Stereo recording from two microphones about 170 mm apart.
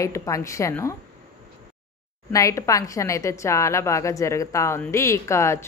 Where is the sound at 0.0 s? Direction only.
20° left (ahead or behind).